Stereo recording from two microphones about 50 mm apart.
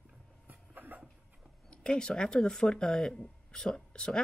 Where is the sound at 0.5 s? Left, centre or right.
Right.